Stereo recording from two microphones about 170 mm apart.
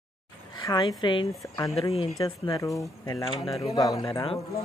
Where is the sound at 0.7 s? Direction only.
25° left (ahead or behind).